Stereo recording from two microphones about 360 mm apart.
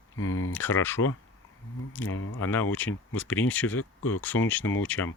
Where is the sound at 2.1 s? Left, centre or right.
Left.